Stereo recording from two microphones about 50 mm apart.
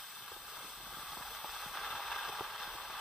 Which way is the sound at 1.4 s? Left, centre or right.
Centre.